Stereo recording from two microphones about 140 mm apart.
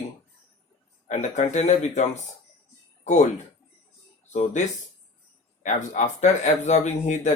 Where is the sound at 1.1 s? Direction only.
55° left (ahead or behind).